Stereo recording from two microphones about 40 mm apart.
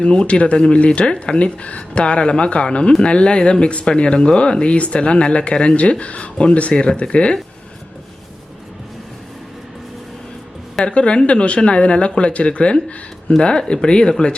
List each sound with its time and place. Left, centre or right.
0.0 s speech: left
10.8 s speech: left